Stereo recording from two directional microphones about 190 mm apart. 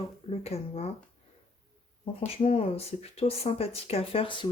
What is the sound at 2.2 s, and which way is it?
Speech, 30° left (ahead or behind).